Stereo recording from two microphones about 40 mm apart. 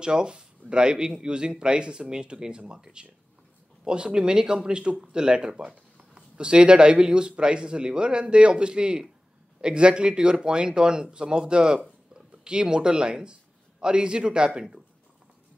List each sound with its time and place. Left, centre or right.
0.0 s a man's voice: right